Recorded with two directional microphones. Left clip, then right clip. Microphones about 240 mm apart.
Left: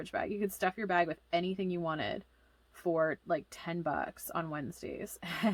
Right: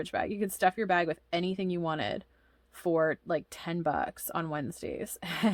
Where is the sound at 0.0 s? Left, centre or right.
Right.